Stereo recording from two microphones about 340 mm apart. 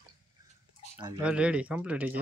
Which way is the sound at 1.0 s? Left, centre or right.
Centre.